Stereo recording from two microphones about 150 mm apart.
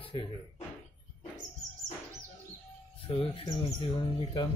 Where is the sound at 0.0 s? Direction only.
35° left (ahead or behind).